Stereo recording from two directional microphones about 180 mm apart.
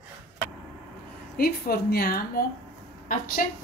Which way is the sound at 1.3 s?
55° left (ahead or behind).